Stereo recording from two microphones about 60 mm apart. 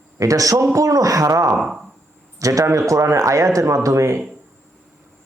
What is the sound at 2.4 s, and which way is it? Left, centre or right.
A man's voice, right.